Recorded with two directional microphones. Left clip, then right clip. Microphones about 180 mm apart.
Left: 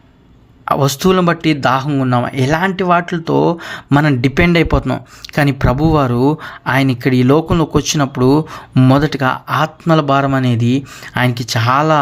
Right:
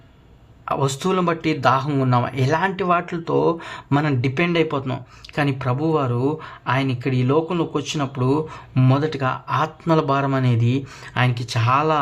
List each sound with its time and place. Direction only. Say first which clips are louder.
0.6 s speech: left 8 dB; 30° left (ahead or behind)